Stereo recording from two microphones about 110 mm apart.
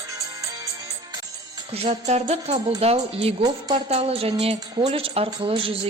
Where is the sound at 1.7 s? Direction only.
65° right (ahead or behind).